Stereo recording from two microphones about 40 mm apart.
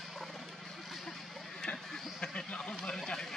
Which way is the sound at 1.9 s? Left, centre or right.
Centre.